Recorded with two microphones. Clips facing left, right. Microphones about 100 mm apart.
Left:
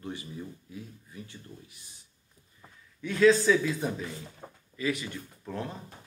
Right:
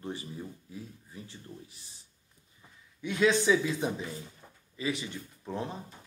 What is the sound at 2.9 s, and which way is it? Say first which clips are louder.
Speech: left 5 dB; 20° right (ahead or behind).